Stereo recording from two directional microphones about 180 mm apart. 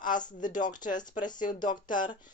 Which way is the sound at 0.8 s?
45° left (ahead or behind).